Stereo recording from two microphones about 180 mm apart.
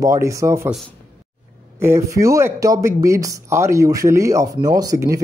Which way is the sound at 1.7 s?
15° right (ahead or behind).